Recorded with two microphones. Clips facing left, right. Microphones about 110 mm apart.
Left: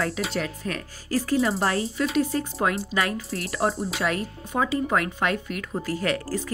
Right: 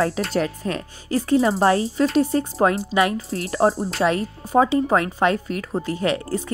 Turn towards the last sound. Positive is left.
turn(degrees=-20)  # may be behind; listen again after turning